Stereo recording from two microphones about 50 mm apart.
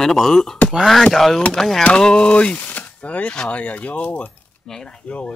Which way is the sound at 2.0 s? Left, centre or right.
Centre.